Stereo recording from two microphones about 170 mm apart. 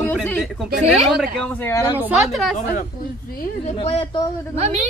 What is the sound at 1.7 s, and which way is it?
Speech, 20° left (ahead or behind).